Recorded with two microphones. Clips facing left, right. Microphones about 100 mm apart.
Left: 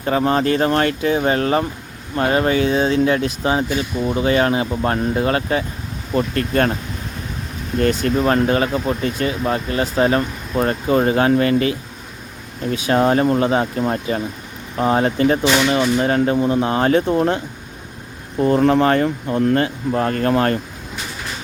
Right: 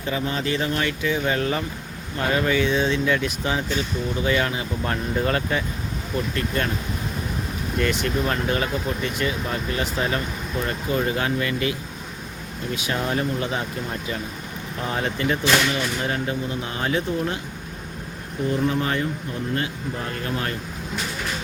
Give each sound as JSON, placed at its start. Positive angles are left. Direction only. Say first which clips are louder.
{"t": 0.0, "sound": "speech", "louder": "left 9 dB", "side_deg": 50}
{"t": 6.1, "sound": "speech", "louder": "left 8 dB", "side_deg": 50}
{"t": 7.8, "sound": "speech", "louder": "left 7 dB", "side_deg": 40}
{"t": 12.9, "sound": "speech", "louder": "left 10 dB", "side_deg": 45}
{"t": 15.4, "sound": "speech", "louder": "left 4 dB", "side_deg": 5}
{"t": 16.0, "sound": "speech", "louder": "left 9 dB", "side_deg": 40}
{"t": 18.4, "sound": "speech", "louder": "left 9 dB", "side_deg": 65}